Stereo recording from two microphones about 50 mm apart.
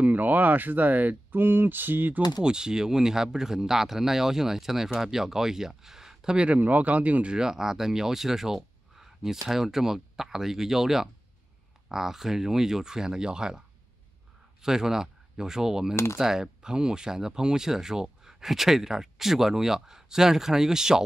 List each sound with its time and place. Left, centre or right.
0.0 s speech: right
2.4 s speech: centre
6.3 s speech: right
6.6 s speech: right
7.3 s speech: centre